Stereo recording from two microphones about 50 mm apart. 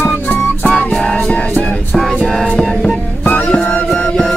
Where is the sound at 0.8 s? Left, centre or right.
Left.